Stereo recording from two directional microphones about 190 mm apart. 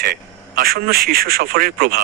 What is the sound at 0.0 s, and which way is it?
Speech, 50° right (ahead or behind).